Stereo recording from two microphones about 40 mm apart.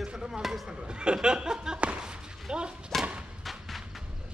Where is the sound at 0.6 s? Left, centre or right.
Right.